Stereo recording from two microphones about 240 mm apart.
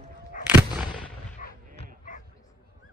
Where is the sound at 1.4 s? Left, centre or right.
Left.